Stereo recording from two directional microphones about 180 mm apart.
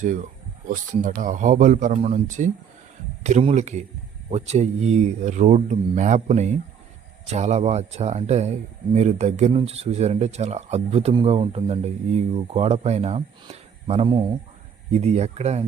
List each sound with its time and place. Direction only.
0.7 s speech: 45° right (ahead or behind)